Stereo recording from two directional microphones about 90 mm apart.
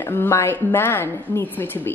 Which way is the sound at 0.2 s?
30° left (ahead or behind).